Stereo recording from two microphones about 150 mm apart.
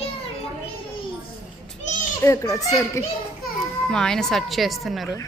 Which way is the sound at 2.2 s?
20° left (ahead or behind).